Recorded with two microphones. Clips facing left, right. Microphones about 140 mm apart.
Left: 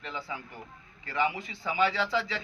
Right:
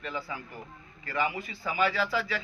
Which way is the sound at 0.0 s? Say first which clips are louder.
Right 2 dB; 20° left (ahead or behind).